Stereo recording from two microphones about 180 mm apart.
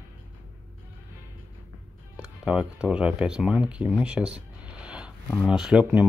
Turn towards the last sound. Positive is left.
turn(degrees=-5)  # may be behind; listen again after turning